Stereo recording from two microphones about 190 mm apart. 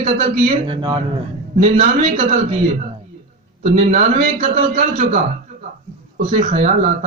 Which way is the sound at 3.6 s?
35° right (ahead or behind).